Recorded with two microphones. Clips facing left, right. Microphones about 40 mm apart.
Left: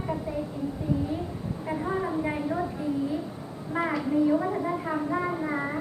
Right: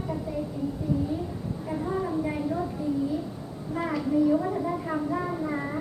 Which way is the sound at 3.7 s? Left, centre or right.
Left.